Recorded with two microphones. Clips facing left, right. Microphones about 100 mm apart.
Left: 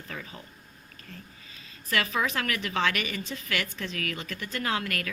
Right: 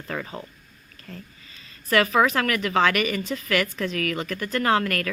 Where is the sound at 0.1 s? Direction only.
55° right (ahead or behind).